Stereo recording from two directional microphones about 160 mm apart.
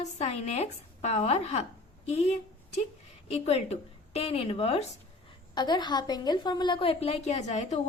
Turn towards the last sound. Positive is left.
turn(degrees=45)  # may be behind; listen again after turning